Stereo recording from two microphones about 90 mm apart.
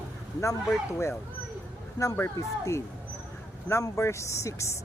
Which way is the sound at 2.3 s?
35° left (ahead or behind).